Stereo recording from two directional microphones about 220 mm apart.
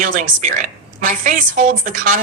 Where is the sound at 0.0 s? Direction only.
35° right (ahead or behind).